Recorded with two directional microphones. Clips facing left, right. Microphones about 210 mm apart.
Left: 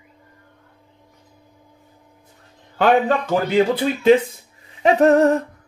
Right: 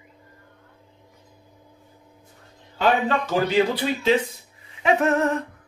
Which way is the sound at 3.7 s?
50° left (ahead or behind).